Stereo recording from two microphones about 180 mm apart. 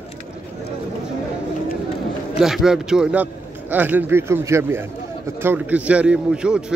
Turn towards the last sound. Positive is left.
turn(degrees=-5)  # may be behind; listen again after turning